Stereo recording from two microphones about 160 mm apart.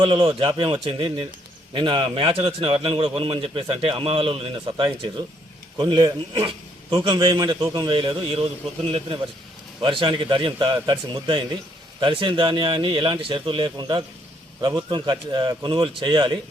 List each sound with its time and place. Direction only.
0.0 s a man's voice: 30° right (ahead or behind)